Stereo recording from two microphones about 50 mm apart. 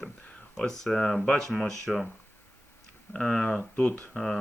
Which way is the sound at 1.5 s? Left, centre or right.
Centre.